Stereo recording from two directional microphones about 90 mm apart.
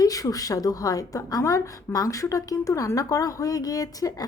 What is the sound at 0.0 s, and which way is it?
A woman's voice, 40° left (ahead or behind).